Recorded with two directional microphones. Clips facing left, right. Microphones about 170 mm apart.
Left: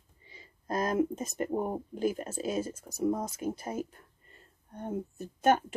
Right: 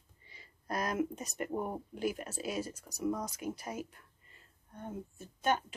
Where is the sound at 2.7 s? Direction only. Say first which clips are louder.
Left 6 dB; 50° left (ahead or behind).